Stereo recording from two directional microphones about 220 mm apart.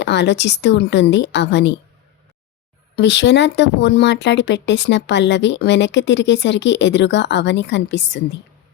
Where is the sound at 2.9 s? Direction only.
55° left (ahead or behind).